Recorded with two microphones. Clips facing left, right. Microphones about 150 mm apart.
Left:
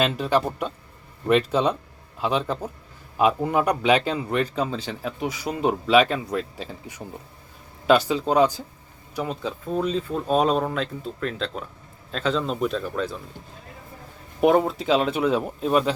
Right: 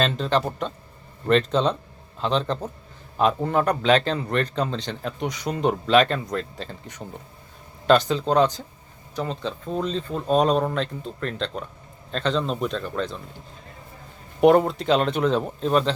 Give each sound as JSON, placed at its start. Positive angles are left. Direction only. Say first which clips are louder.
{"t": 0.0, "sound": "a man's voice", "louder": "left 1 dB", "side_deg": 10}
{"t": 14.4, "sound": "speech", "louder": "right 2 dB", "side_deg": 0}